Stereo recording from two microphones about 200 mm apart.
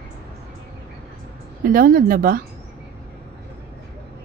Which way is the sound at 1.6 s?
45° right (ahead or behind).